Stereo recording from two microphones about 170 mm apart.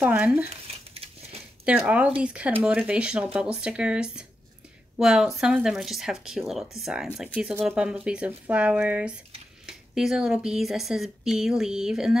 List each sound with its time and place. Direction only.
0.0 s speech: 10° right (ahead or behind)
0.5 s a sound: 35° right (ahead or behind)
1.7 s speech: 10° right (ahead or behind)